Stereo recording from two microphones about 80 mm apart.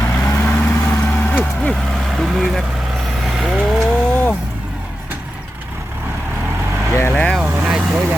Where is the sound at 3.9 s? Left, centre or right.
Centre.